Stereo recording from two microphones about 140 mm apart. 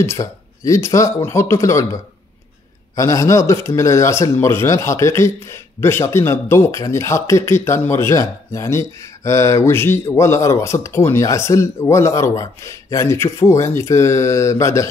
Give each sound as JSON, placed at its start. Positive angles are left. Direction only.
{"t": 0.0, "sound": "speech", "side_deg": 20}
{"t": 3.0, "sound": "speech", "side_deg": 20}